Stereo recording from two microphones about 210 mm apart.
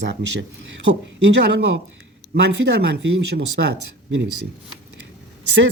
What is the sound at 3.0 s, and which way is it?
Speech, 55° right (ahead or behind).